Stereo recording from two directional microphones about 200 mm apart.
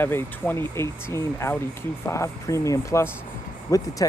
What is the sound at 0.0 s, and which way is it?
Speech, 10° left (ahead or behind).